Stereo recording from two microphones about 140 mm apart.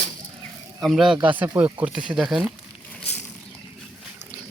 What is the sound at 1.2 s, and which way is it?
Speech, 10° right (ahead or behind).